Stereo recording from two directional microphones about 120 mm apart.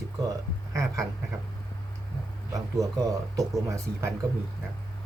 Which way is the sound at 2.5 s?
25° right (ahead or behind).